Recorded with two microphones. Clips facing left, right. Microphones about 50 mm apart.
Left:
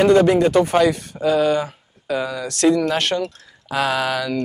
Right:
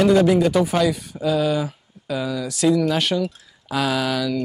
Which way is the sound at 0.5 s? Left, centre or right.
Centre.